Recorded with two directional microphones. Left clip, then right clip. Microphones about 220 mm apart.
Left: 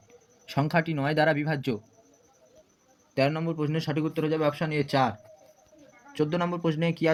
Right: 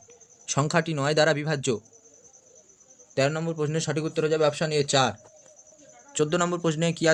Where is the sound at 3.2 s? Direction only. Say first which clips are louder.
Right 1 dB; 25° right (ahead or behind).